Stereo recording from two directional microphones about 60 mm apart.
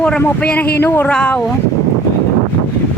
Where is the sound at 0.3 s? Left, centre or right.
Left.